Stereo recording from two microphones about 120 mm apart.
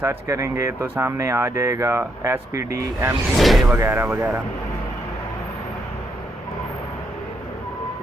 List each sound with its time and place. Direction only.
0.0 s speech: 25° right (ahead or behind)
3.3 s speech: centre (ahead or behind)
3.6 s speech: 15° right (ahead or behind)